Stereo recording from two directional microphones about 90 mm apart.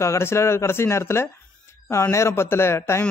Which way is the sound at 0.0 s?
30° left (ahead or behind).